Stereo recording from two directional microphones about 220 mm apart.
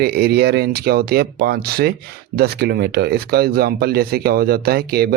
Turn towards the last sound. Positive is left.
turn(degrees=-45)  # may be behind; listen again after turning